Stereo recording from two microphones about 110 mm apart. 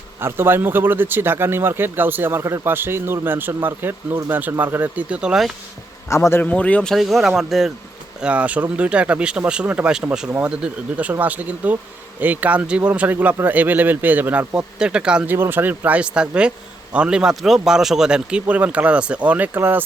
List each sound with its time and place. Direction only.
0.2 s a man's voice: 20° right (ahead or behind)
6.1 s a man's voice: 25° left (ahead or behind)
6.4 s speech: 10° left (ahead or behind); by 19.8 s 20° right (ahead or behind)